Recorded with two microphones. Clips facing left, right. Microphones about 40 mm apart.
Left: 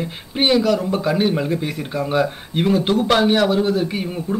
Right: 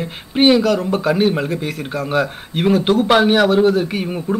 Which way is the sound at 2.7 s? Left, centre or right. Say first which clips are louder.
Right 4 dB; right.